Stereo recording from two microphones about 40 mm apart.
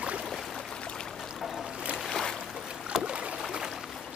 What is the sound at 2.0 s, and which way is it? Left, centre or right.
Boat, centre.